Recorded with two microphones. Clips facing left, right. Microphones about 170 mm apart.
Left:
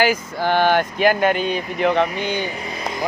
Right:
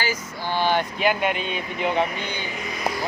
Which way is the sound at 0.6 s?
55° left (ahead or behind).